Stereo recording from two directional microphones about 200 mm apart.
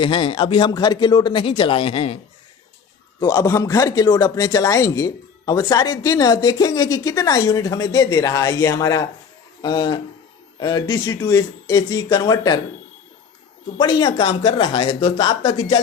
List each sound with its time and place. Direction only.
0.0 s speech: 25° left (ahead or behind)
3.2 s speech: 20° left (ahead or behind)
13.7 s speech: 20° left (ahead or behind)